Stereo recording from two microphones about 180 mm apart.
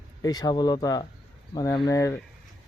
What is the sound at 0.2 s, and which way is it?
Speech, 20° left (ahead or behind).